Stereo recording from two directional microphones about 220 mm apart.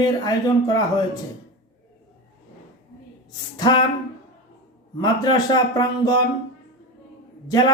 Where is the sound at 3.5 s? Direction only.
20° left (ahead or behind).